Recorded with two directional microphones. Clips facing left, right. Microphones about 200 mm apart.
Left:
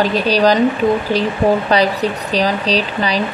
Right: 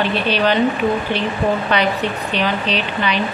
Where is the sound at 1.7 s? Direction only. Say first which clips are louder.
Left 3 dB; 35° left (ahead or behind).